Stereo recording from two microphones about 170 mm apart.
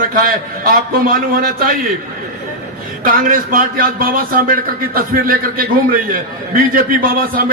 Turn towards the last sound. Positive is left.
turn(degrees=-55)  # may be behind; listen again after turning